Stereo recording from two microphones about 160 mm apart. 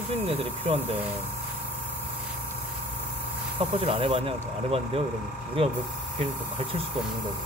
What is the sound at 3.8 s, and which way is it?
Speech, 35° right (ahead or behind).